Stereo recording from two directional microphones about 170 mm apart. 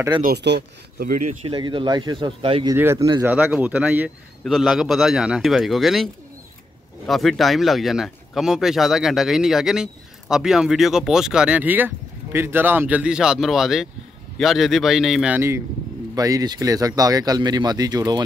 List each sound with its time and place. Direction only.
0.2 s speech: 75° right (ahead or behind)
1.4 s speech: 30° right (ahead or behind)
2.7 s speech: 15° right (ahead or behind)
7.1 s speech: centre (ahead or behind); by 18.2 s 25° right (ahead or behind)